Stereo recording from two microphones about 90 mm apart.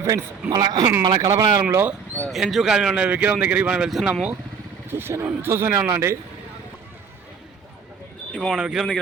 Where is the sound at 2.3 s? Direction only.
Centre (ahead or behind).